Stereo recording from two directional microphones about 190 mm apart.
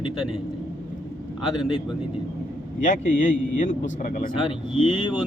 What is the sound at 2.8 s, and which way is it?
Speech, 40° left (ahead or behind).